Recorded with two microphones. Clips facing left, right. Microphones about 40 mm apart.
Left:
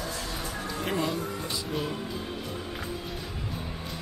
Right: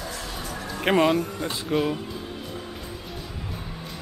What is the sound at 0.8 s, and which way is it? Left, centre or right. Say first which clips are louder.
Speech: right 10 dB; right.